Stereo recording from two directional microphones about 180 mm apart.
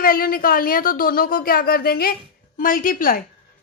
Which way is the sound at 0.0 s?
55° left (ahead or behind).